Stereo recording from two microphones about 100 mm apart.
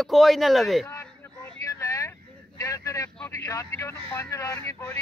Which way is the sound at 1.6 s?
35° left (ahead or behind).